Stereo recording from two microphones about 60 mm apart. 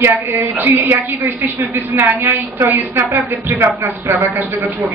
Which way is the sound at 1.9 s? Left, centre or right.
Right.